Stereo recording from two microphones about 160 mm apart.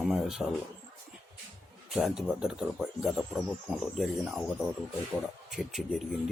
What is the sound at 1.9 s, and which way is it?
Speech, centre (ahead or behind).